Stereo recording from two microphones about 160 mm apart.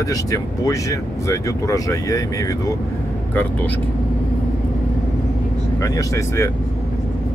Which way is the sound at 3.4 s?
10° left (ahead or behind).